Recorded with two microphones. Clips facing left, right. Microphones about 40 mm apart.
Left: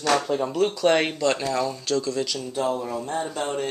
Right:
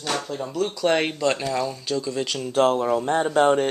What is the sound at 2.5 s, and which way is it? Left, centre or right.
Speech, right.